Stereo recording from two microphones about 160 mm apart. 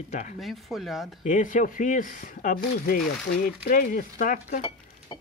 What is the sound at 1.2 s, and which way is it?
Speech, 55° left (ahead or behind).